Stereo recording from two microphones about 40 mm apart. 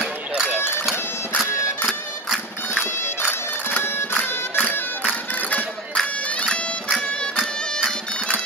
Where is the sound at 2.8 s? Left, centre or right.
Left.